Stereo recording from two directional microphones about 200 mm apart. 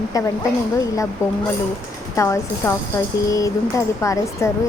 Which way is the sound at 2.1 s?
15° left (ahead or behind).